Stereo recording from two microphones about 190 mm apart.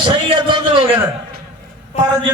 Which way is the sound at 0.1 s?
25° right (ahead or behind).